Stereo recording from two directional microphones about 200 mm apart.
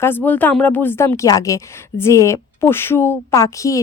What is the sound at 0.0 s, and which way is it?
A woman's voice, 10° left (ahead or behind).